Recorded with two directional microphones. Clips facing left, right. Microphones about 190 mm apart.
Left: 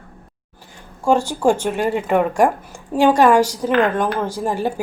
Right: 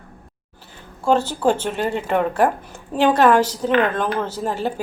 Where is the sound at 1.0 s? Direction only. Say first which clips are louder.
Left 1 dB; 10° left (ahead or behind).